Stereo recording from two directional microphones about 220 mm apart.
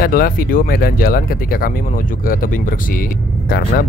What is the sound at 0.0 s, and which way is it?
Speech, 40° left (ahead or behind).